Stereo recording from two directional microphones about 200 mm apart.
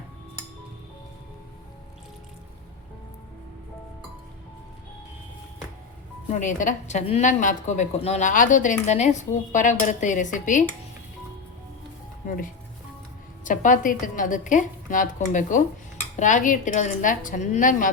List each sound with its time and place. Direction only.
6.4 s a woman's voice: 40° left (ahead or behind)
13.4 s a woman's voice: 40° left (ahead or behind)